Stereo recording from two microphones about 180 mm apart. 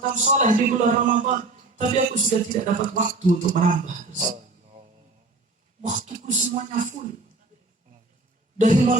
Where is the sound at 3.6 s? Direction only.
45° right (ahead or behind).